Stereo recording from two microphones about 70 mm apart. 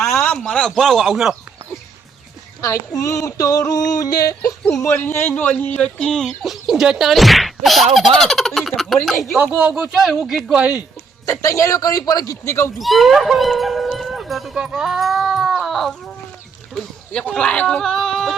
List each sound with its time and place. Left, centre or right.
0.3 s fowl: centre
2.6 s a woman's voice: left
2.9 s a man's voice: left
4.8 s a man's voice: left
5.8 s speech: centre
6.2 s fowl: centre
9.6 s speech: centre
9.9 s fowl: centre
10.6 s speech: centre
11.3 s a man's voice: left
12.8 s speech: centre
17.1 s speech: centre